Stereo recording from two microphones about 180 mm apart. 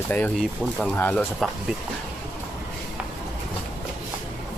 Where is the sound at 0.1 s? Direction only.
5° left (ahead or behind).